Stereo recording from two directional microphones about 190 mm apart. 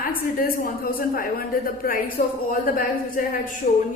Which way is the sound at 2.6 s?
50° left (ahead or behind).